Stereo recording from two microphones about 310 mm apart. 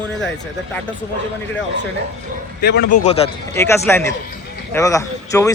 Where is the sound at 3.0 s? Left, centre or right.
Centre.